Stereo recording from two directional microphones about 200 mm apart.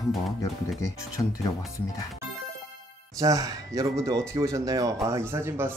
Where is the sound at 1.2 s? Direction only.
15° left (ahead or behind).